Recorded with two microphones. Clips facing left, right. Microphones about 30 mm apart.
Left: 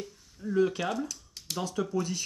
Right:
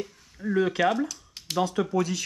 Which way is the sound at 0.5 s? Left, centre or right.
Right.